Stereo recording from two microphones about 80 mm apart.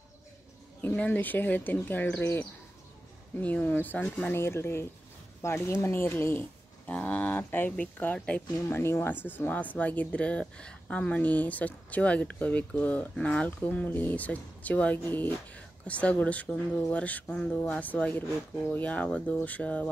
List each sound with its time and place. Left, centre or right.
0.7 s speech: left
8.6 s speech: left